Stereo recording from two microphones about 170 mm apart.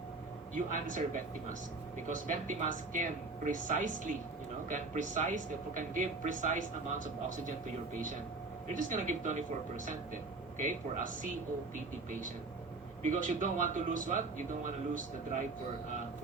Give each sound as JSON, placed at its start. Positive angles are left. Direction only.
{"t": 0.5, "sound": "speech", "side_deg": -50}
{"t": 8.7, "sound": "speech", "side_deg": -50}
{"t": 13.0, "sound": "speech", "side_deg": -50}